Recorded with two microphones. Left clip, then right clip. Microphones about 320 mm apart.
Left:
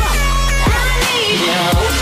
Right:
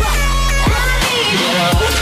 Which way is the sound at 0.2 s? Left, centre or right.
Left.